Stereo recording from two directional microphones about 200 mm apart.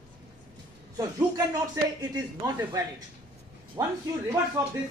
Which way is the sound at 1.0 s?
20° right (ahead or behind).